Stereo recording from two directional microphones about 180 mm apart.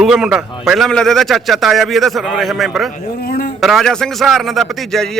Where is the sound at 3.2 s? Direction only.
55° left (ahead or behind).